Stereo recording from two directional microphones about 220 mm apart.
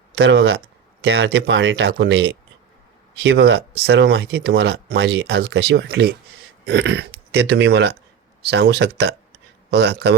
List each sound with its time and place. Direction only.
0.2 s speech: 55° right (ahead or behind)